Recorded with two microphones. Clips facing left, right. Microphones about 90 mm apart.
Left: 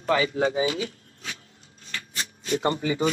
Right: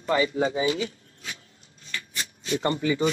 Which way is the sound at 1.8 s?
40° left (ahead or behind).